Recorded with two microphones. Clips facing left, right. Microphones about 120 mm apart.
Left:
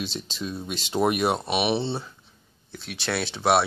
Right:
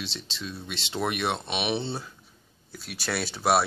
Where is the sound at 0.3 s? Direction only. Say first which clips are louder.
Left 5 dB; 15° left (ahead or behind).